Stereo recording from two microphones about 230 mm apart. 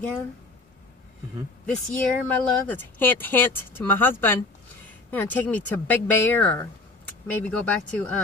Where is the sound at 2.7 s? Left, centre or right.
Centre.